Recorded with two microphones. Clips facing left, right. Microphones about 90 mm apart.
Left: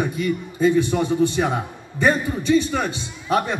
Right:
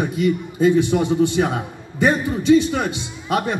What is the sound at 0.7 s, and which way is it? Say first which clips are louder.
Speech: right 2 dB; 15° right (ahead or behind).